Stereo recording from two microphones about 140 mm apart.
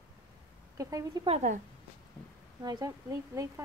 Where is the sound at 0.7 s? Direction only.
25° right (ahead or behind).